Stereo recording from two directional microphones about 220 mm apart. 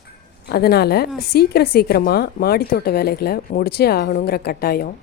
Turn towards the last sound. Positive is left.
turn(degrees=45)  # may be behind; listen again after turning